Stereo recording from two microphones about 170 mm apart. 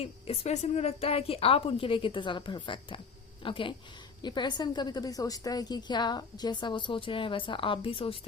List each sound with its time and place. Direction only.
0.0 s a woman's voice: 40° left (ahead or behind)